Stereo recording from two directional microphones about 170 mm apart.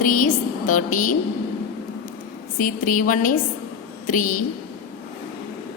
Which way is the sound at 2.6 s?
55° left (ahead or behind).